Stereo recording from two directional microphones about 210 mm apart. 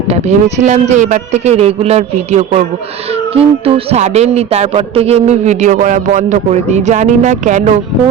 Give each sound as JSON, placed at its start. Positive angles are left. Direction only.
{"t": 0.1, "sound": "music", "side_deg": -30}